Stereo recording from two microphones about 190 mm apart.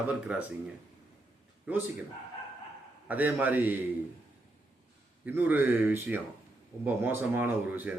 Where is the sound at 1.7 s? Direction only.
10° right (ahead or behind).